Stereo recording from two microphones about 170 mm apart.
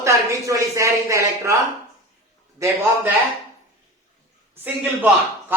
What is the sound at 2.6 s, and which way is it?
Speech, 15° right (ahead or behind).